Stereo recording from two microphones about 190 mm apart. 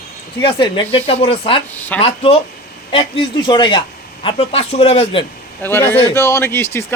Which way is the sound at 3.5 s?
25° left (ahead or behind).